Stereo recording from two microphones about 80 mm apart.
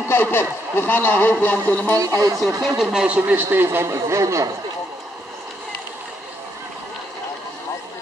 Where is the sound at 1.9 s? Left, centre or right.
Right.